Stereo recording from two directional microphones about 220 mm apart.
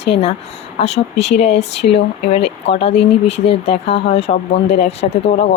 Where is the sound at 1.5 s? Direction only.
50° left (ahead or behind).